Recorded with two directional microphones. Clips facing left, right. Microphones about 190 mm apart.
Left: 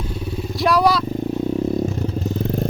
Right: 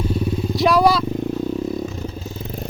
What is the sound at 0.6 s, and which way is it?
Speech, centre (ahead or behind).